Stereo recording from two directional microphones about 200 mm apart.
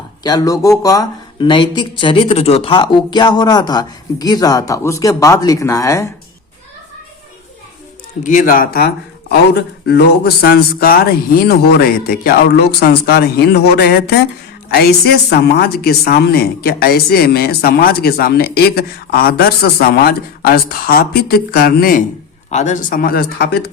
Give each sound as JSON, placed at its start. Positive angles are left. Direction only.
{"t": 0.2, "sound": "speech", "side_deg": 20}
{"t": 8.2, "sound": "a woman's voice", "side_deg": 40}
{"t": 22.4, "sound": "a woman's voice", "side_deg": 35}